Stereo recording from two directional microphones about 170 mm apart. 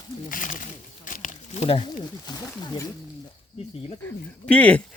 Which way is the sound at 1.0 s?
50° left (ahead or behind).